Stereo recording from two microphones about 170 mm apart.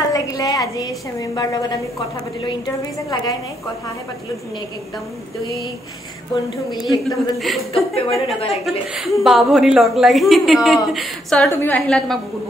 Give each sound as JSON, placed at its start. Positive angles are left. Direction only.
{"t": 0.1, "sound": "a woman's voice", "side_deg": 20}
{"t": 6.8, "sound": "a woman's voice", "side_deg": 0}
{"t": 7.7, "sound": "a woman's voice", "side_deg": 35}
{"t": 8.6, "sound": "a woman's voice", "side_deg": 0}